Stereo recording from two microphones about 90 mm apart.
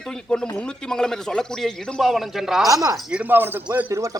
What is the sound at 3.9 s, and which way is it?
Speech, 35° right (ahead or behind).